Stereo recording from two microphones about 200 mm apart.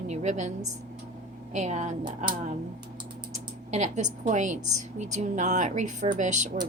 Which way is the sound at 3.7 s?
35° right (ahead or behind).